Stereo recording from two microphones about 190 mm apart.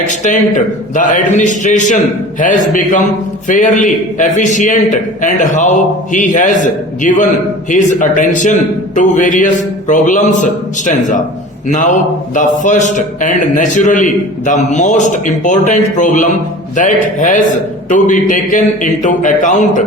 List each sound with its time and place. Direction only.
0.1 s a man's voice: 40° left (ahead or behind)